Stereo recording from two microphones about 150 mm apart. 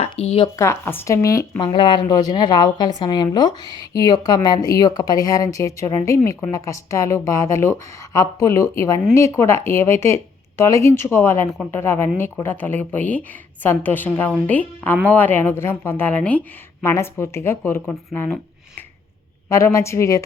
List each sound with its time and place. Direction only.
0.0 s speech: 45° left (ahead or behind)
0.5 s a woman's voice: 20° left (ahead or behind)
19.5 s a woman's voice: 20° left (ahead or behind)